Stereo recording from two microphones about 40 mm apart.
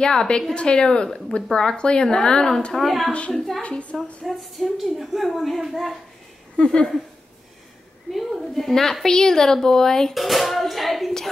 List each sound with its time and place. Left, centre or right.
0.0 s a woman's voice: centre
0.6 s speech: left
2.7 s a woman's voice: centre
3.3 s a woman's voice: centre
6.5 s speech: left
8.1 s a woman's voice: centre
10.1 s music: centre